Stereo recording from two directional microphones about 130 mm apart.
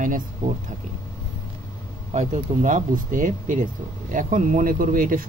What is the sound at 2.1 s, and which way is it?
Speech, 70° right (ahead or behind).